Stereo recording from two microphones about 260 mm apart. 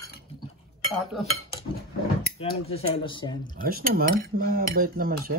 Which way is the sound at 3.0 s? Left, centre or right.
Centre.